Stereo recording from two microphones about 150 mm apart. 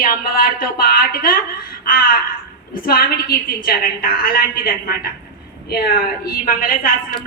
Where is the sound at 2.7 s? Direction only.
80° left.